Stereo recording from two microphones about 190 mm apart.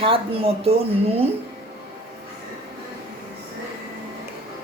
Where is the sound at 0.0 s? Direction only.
30° right (ahead or behind).